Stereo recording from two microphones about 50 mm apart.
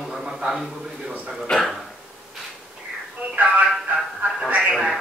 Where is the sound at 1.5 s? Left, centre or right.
Centre.